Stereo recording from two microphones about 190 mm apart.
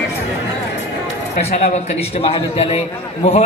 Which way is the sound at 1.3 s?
40° left (ahead or behind).